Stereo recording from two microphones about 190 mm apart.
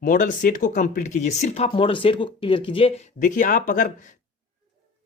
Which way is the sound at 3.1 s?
45° left (ahead or behind).